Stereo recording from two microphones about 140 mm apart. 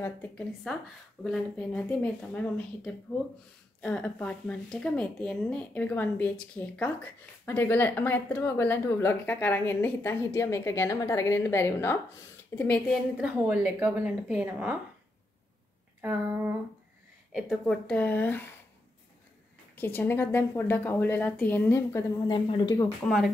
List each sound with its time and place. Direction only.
0.7 s speech: 5° left (ahead or behind)
13.2 s a woman's voice: 10° right (ahead or behind)
17.3 s speech: 5° right (ahead or behind); by 18.4 s 10° left (ahead or behind)
19.7 s speech: 15° left (ahead or behind)
22.3 s speech: 30° left (ahead or behind)
23.0 s speech: centre (ahead or behind)